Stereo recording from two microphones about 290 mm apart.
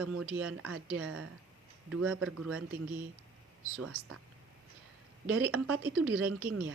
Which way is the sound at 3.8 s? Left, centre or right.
Right.